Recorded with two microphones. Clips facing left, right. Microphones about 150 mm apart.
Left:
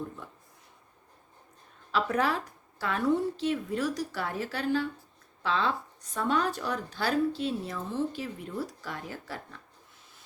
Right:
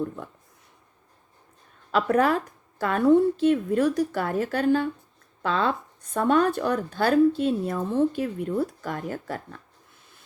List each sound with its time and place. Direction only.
1.9 s speech: 55° right (ahead or behind)